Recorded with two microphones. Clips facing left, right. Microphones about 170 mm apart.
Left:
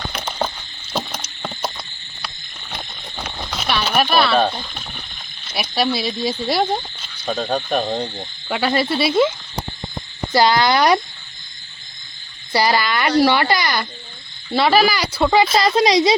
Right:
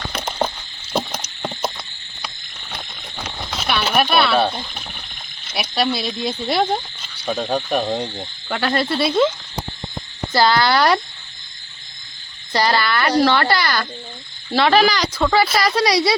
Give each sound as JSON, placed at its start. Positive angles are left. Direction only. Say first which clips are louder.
{"t": 0.3, "sound": "a sound", "louder": "right 2 dB", "side_deg": -15}
{"t": 3.5, "sound": "speech", "louder": "even", "side_deg": 0}
{"t": 10.3, "sound": "speech", "louder": "left 1 dB", "side_deg": 15}
{"t": 12.5, "sound": "speech", "louder": "even", "side_deg": 10}
{"t": 14.5, "sound": "speech", "louder": "even", "side_deg": 5}